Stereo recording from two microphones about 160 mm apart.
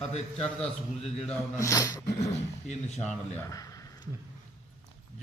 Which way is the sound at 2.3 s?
45° left (ahead or behind).